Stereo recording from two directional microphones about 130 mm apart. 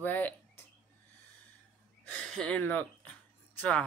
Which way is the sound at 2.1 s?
5° left (ahead or behind).